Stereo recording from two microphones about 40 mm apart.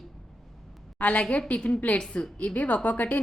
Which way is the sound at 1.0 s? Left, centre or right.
Left.